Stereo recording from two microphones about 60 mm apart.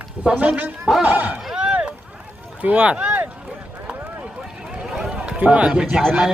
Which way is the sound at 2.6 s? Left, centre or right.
Right.